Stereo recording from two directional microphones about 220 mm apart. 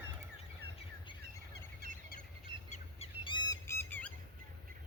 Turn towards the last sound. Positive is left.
turn(degrees=10)  # may be behind; listen again after turning